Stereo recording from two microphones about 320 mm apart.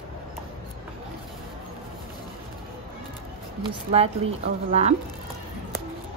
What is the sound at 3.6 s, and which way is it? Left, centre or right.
Speech, centre.